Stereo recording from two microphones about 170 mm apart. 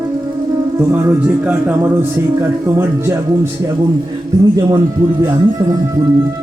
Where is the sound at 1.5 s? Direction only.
10° right (ahead or behind).